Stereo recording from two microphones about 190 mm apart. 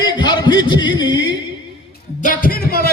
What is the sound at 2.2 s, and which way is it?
Speech, 45° left (ahead or behind).